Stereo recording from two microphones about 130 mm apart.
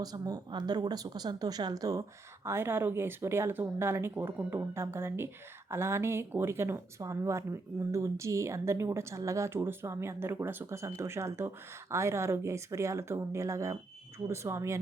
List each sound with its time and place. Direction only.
0.0 s speech: 30° right (ahead or behind)